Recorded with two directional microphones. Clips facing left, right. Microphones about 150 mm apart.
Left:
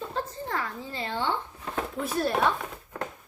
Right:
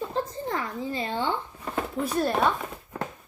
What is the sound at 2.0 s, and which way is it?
Speech, centre (ahead or behind).